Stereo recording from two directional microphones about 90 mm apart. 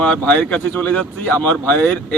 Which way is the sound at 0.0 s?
15° left (ahead or behind).